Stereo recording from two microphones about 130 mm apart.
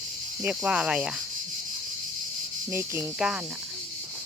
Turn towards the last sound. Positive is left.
turn(degrees=-5)  # may be behind; listen again after turning